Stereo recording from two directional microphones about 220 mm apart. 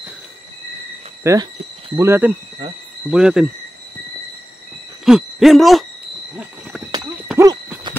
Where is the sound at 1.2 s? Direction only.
15° right (ahead or behind).